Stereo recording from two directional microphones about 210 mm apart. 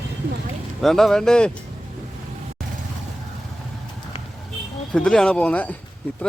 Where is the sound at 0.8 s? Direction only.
Centre (ahead or behind).